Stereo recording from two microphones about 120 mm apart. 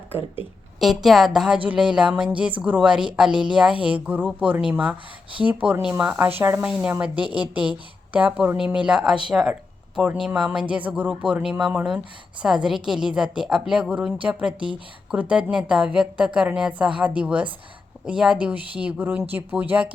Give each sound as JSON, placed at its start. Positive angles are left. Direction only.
{"t": 0.8, "sound": "a woman's voice", "side_deg": 0}
{"t": 8.1, "sound": "speech", "side_deg": -10}